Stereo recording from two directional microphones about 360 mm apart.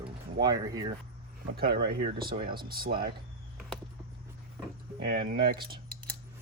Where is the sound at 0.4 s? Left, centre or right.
Centre.